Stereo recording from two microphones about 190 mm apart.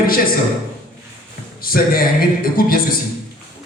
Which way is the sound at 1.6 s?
50° left (ahead or behind).